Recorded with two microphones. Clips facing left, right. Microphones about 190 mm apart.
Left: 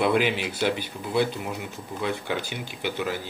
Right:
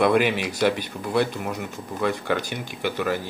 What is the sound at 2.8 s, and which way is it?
Speech, 55° right (ahead or behind).